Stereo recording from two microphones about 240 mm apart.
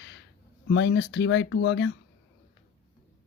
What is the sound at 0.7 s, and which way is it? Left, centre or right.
Speech, left.